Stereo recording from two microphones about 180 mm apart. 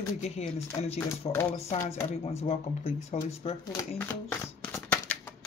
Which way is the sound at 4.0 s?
10° left (ahead or behind).